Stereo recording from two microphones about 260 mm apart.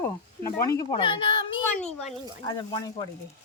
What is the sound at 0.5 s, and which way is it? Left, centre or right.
Speech, centre.